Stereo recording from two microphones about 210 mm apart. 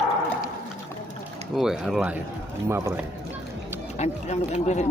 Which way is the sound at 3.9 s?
35° left (ahead or behind).